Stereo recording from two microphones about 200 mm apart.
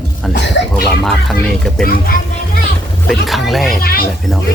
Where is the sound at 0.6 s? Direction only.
65° left (ahead or behind).